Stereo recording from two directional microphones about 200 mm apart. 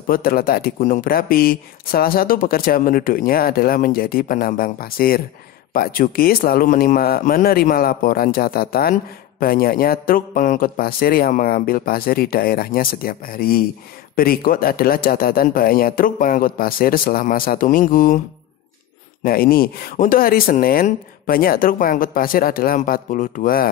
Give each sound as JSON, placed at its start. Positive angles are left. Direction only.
{"t": 0.0, "sound": "speech", "side_deg": 45}
{"t": 19.2, "sound": "speech", "side_deg": 45}